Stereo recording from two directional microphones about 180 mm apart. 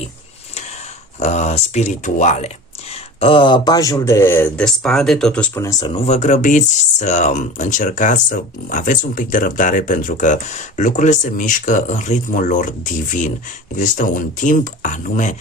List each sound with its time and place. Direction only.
1.2 s speech: 40° left (ahead or behind); by 5.5 s 5° left (ahead or behind)
5.8 s speech: 35° left (ahead or behind)